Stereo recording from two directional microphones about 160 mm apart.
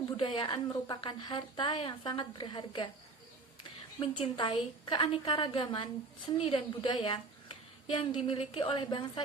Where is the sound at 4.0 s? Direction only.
30° left (ahead or behind).